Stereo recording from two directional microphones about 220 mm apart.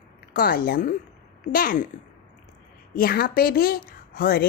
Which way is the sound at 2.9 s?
40° left (ahead or behind).